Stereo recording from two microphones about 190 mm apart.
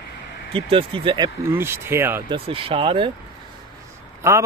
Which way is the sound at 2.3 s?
30° right (ahead or behind).